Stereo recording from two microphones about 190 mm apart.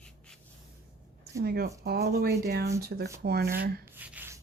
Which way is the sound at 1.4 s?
55° right (ahead or behind).